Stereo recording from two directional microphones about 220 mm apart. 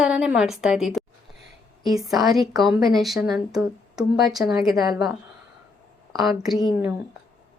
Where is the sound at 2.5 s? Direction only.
Centre (ahead or behind).